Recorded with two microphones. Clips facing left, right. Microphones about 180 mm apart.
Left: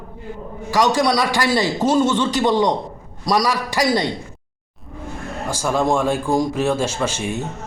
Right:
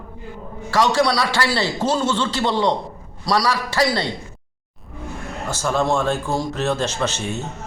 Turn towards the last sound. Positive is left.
turn(degrees=10)  # may be behind; listen again after turning